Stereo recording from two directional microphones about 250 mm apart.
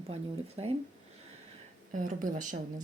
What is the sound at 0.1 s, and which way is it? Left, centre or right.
Speech, right.